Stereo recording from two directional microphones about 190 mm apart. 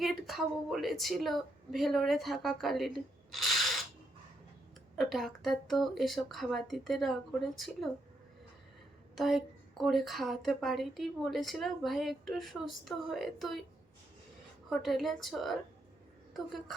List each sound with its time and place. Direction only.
0.0 s a woman's voice: centre (ahead or behind)
4.9 s speech: centre (ahead or behind)
9.1 s speech: centre (ahead or behind)
14.7 s a woman's voice: centre (ahead or behind)